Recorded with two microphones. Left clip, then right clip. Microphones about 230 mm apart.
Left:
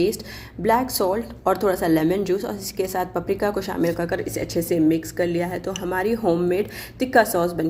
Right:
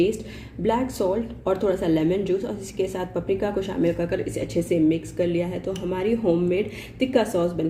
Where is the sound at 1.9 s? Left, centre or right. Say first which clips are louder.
Left 2 dB; left.